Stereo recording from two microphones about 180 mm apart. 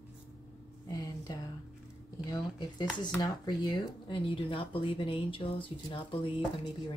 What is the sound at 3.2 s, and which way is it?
Speech, 20° left (ahead or behind).